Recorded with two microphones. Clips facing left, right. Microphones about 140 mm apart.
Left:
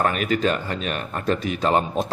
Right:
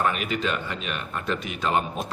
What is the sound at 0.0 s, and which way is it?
Speech, 45° left (ahead or behind).